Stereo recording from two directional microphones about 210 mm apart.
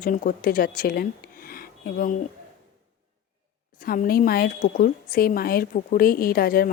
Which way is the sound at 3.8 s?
45° left (ahead or behind).